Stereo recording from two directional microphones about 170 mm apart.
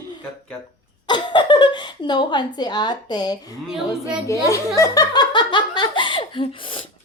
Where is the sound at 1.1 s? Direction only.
25° left (ahead or behind).